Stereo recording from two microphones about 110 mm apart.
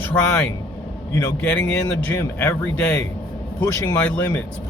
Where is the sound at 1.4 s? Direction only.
15° left (ahead or behind).